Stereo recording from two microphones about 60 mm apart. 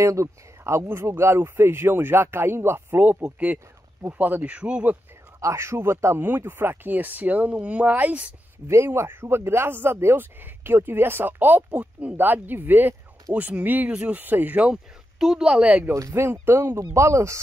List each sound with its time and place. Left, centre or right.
0.0 s speech: right
5.4 s speech: right
6.2 s speech: right
8.6 s speech: right
11.7 s speech: right
12.2 s speech: right
14.7 s speech: centre
15.9 s speech: right
16.3 s speech: right